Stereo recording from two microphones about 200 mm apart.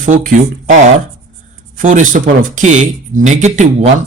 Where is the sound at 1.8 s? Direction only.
40° right (ahead or behind).